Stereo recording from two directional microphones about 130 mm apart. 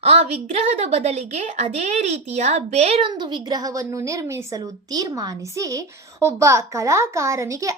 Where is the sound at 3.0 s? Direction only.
35° right (ahead or behind).